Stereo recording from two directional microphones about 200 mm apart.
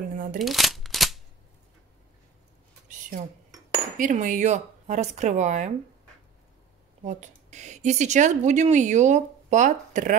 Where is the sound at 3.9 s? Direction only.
40° right (ahead or behind).